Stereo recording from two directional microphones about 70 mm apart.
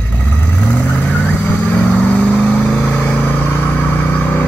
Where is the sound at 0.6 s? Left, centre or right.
Centre.